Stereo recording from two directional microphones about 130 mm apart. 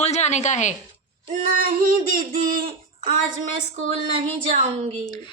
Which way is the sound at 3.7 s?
55° right (ahead or behind).